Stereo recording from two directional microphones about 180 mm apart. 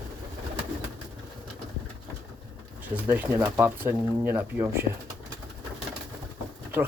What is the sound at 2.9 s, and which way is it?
Speech, 10° right (ahead or behind).